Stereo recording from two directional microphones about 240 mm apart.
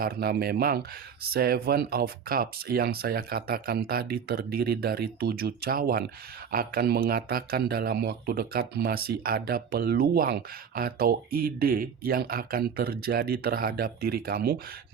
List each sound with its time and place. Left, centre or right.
0.0 s speech: right